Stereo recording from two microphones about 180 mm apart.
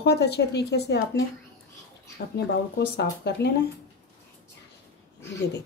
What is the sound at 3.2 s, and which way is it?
Speech, 65° left (ahead or behind).